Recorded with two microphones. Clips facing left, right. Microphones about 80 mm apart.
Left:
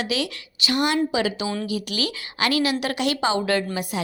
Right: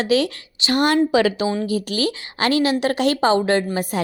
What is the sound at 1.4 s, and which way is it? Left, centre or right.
Speech, right.